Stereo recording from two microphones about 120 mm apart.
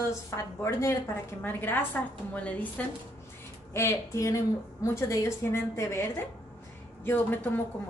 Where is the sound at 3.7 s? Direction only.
25° left (ahead or behind).